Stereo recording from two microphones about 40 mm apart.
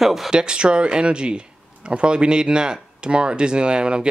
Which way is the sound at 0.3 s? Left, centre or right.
Right.